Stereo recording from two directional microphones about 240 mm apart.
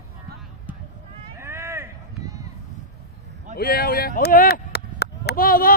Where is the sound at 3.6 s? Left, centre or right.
Left.